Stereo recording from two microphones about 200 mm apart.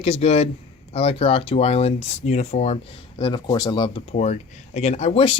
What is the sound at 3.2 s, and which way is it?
Speech, 20° left (ahead or behind).